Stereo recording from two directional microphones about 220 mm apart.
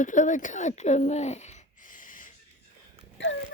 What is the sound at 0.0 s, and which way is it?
Speech, 35° left (ahead or behind).